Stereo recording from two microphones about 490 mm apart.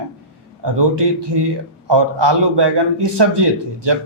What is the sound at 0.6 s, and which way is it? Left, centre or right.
A man's voice, right.